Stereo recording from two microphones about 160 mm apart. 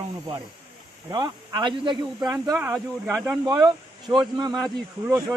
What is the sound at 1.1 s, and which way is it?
A man's voice, 25° right (ahead or behind).